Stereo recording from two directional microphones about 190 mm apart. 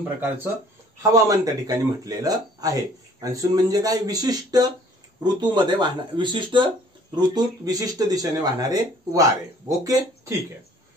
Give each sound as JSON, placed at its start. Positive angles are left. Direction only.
{"t": 1.1, "sound": "speech", "side_deg": -20}